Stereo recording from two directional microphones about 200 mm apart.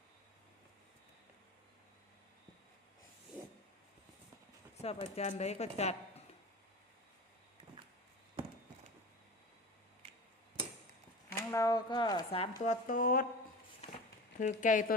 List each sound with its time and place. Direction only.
4.8 s speech: 30° left (ahead or behind)
11.5 s a woman's voice: 15° left (ahead or behind)
12.9 s speech: 45° left (ahead or behind)
13.8 s a sound: 30° left (ahead or behind)
14.3 s speech: 40° left (ahead or behind)